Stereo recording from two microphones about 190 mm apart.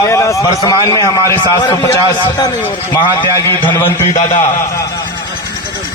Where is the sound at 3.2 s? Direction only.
20° left (ahead or behind).